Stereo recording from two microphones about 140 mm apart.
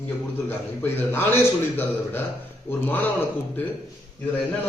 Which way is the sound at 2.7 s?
15° left (ahead or behind).